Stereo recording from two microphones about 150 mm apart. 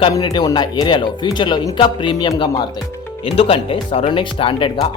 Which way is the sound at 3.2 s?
40° left (ahead or behind).